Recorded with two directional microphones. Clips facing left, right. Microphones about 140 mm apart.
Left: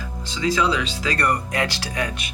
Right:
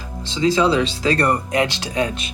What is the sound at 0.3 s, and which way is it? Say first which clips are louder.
Speech: right 5 dB; 30° right (ahead or behind).